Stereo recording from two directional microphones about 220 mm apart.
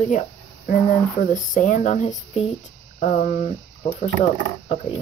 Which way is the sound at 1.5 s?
35° left (ahead or behind).